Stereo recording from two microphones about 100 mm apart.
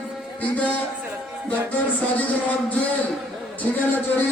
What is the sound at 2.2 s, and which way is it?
A man's voice, 15° left (ahead or behind).